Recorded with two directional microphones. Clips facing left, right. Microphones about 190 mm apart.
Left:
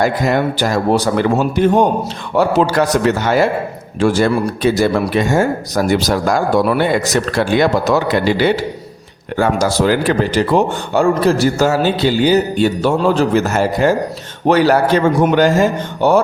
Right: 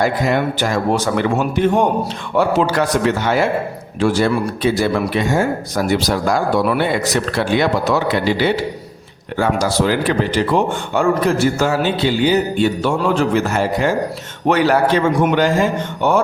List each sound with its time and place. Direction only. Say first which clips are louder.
0.0 s a man's voice: left 2 dB; 40° left (ahead or behind)